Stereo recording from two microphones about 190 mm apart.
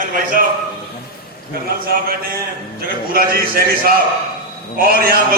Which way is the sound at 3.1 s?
50° right (ahead or behind).